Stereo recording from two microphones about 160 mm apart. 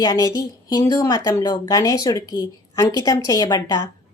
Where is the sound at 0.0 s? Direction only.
25° left (ahead or behind).